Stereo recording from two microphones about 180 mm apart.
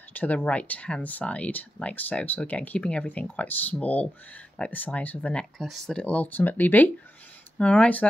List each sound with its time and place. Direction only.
0.1 s speech: 10° left (ahead or behind)